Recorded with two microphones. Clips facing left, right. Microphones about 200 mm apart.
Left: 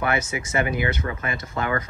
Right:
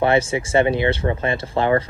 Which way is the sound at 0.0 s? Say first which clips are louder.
Right 7 dB; 30° right (ahead or behind).